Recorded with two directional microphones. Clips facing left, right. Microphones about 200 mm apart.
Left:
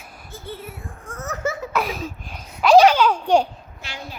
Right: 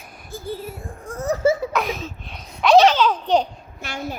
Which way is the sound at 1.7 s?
5° left (ahead or behind).